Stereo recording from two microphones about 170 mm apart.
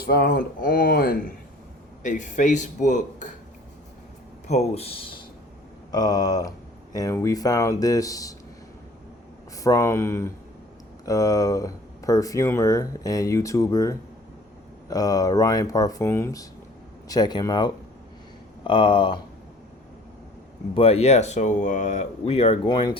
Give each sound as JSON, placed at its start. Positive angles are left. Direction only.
{"t": 0.0, "sound": "speech", "side_deg": 65}
{"t": 2.0, "sound": "a man's voice", "side_deg": 45}
{"t": 4.4, "sound": "speech", "side_deg": 40}
{"t": 9.6, "sound": "speech", "side_deg": 20}
{"t": 20.7, "sound": "speech", "side_deg": 35}
{"t": 22.6, "sound": "speech", "side_deg": 25}